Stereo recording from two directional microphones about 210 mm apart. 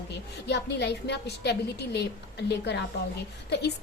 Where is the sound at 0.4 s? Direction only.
55° left (ahead or behind).